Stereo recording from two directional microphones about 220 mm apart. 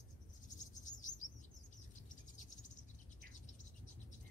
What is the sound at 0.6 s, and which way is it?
Cricket, 35° left (ahead or behind).